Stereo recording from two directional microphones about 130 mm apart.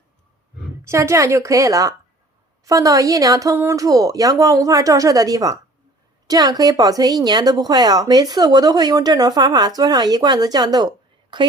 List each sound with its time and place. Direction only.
0.9 s speech: 20° right (ahead or behind)